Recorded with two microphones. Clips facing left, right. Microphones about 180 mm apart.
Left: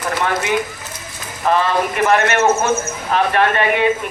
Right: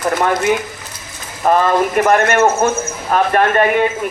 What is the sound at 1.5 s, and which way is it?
A man's voice, 45° right (ahead or behind).